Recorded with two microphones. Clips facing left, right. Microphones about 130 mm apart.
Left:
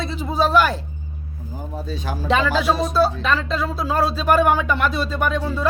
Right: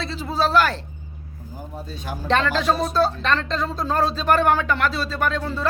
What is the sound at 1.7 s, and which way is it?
Speech, 90° left.